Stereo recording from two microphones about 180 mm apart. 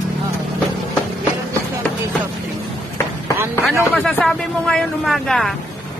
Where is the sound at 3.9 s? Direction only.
Centre (ahead or behind).